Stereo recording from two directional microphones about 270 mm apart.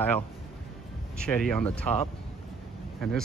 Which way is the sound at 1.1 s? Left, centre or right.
Centre.